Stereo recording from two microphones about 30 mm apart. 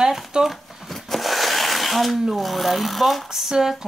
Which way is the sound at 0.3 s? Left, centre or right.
Right.